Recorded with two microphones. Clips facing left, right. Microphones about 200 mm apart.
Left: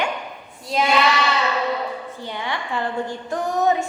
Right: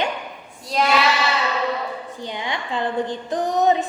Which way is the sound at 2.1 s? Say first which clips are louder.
Even; 15° right (ahead or behind).